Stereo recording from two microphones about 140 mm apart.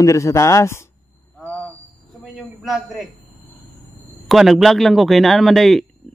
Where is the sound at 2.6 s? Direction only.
Centre (ahead or behind).